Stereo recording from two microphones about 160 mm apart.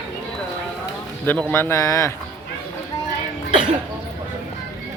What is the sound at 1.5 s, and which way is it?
Speech, 15° left (ahead or behind).